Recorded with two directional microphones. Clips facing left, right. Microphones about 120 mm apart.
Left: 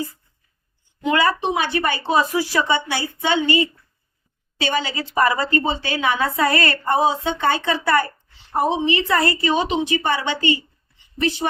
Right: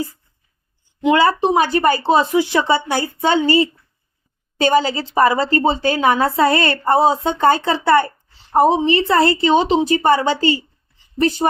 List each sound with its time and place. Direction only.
1.0 s a woman's voice: 25° right (ahead or behind)
2.1 s a woman's voice: 25° right (ahead or behind); by 5.0 s 40° right (ahead or behind)
5.0 s a woman's voice: 25° right (ahead or behind)
8.5 s a woman's voice: 40° right (ahead or behind)